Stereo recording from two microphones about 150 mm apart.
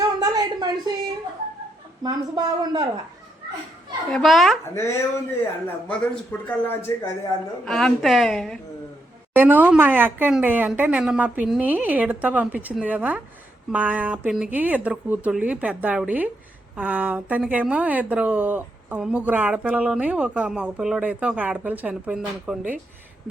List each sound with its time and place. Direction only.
0.2 s a sound: 25° right (ahead or behind)
2.0 s a man's voice: 25° right (ahead or behind)
4.1 s a woman's voice: centre (ahead or behind)
4.7 s speech: 20° left (ahead or behind)
5.6 s speech: 10° left (ahead or behind)
7.6 s a woman's voice: 5° left (ahead or behind)
9.3 s speech: 15° right (ahead or behind)